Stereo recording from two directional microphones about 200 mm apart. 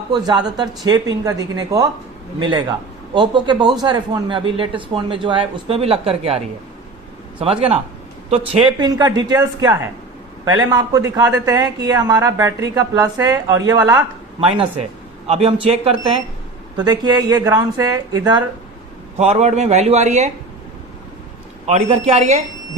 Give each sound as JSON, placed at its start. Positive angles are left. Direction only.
{"t": 0.1, "sound": "speech", "side_deg": -20}
{"t": 19.2, "sound": "a man's voice", "side_deg": -35}
{"t": 21.7, "sound": "a man's voice", "side_deg": -35}